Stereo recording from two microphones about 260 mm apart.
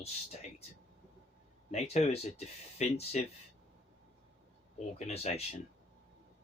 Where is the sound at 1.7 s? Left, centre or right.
Left.